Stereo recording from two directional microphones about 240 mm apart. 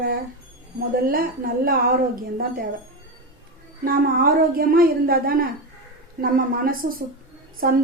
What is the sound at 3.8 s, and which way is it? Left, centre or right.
A woman's voice, right.